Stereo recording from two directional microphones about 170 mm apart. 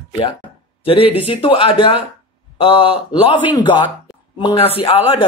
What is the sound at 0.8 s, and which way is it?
Speech, 35° left (ahead or behind).